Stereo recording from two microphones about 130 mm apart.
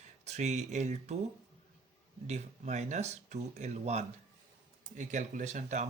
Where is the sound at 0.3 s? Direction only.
60° right (ahead or behind).